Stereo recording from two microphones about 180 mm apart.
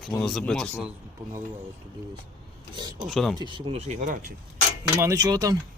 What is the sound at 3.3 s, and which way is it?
Speech, 25° right (ahead or behind).